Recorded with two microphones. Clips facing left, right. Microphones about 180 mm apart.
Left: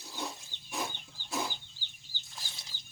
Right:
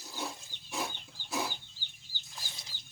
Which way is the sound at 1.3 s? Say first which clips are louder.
Even; 5° right (ahead or behind).